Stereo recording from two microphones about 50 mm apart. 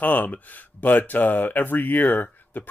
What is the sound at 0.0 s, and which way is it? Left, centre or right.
Speech, left.